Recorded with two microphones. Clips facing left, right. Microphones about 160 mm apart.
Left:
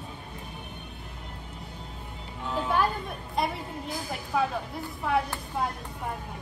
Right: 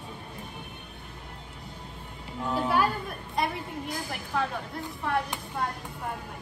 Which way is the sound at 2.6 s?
5° right (ahead or behind).